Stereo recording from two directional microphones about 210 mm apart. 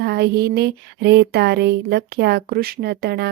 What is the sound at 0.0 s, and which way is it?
Speech, 50° right (ahead or behind).